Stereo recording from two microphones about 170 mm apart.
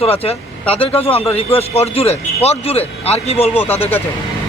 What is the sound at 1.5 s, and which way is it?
A man's voice, 35° left (ahead or behind).